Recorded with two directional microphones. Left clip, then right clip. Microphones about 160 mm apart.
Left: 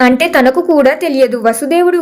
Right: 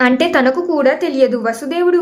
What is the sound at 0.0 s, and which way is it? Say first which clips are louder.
A woman's voice: left 4 dB; 30° left (ahead or behind).